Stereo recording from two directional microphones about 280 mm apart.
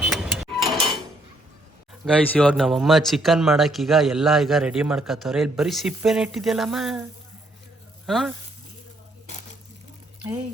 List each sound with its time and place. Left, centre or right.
0.0 s tick-tock: centre
2.0 s a man's voice: centre
8.0 s speech: centre